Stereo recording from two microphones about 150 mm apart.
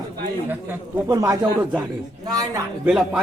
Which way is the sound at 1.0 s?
25° right (ahead or behind).